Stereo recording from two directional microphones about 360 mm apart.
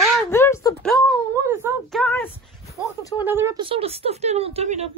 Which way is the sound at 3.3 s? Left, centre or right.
Centre.